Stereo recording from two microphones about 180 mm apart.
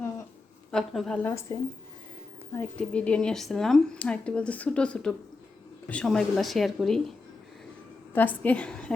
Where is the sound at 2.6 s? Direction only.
5° left (ahead or behind).